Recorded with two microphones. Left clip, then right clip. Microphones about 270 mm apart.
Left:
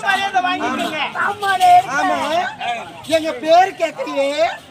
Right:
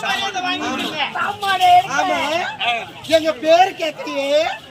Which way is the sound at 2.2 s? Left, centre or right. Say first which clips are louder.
Even; centre.